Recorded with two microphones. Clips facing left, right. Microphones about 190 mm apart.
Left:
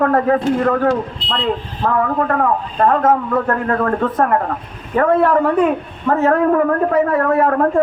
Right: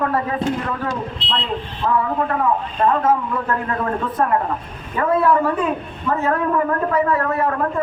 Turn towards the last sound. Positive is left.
turn(degrees=50)  # may be behind; listen again after turning